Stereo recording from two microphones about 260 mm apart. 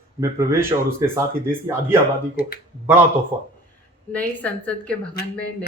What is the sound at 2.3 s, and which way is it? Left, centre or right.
Speech, left.